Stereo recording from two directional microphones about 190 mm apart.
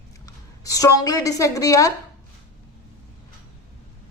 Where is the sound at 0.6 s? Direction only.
20° left (ahead or behind).